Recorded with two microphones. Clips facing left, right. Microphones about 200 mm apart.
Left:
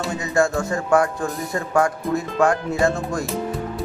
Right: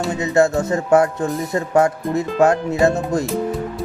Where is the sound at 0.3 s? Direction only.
20° right (ahead or behind).